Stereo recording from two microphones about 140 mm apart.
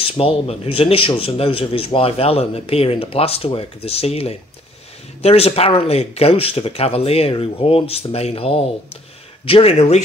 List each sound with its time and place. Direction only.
0.0 s speech: 40° left (ahead or behind)